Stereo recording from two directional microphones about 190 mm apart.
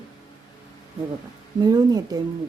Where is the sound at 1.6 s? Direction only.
20° right (ahead or behind).